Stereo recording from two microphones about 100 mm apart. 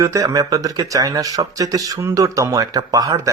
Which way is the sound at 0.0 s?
35° right (ahead or behind).